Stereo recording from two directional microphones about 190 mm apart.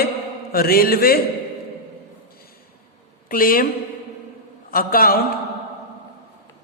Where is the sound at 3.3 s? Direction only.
50° left (ahead or behind).